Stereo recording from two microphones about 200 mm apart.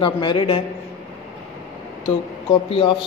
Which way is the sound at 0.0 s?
25° left (ahead or behind).